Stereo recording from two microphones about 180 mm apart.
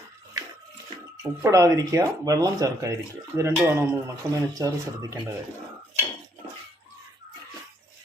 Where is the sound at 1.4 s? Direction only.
15° right (ahead or behind).